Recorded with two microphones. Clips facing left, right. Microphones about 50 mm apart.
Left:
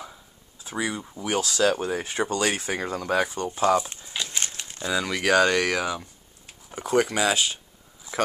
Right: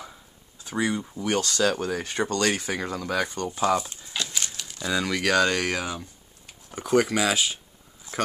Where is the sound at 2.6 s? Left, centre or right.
Left.